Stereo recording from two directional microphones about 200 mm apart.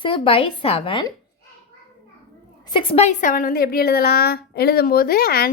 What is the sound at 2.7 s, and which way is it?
A woman's voice, 25° left (ahead or behind).